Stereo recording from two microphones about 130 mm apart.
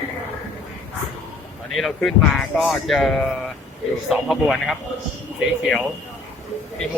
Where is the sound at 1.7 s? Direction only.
Centre (ahead or behind).